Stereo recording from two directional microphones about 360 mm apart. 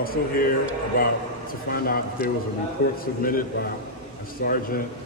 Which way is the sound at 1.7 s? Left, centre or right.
Left.